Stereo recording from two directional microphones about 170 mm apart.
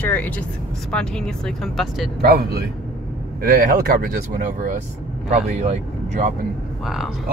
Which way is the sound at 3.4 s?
55° right (ahead or behind).